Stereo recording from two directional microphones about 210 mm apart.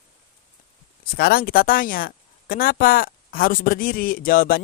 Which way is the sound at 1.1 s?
45° left (ahead or behind).